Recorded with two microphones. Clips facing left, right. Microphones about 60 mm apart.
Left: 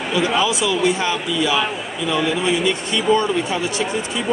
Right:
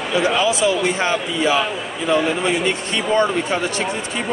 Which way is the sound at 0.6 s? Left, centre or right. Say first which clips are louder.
Even; right.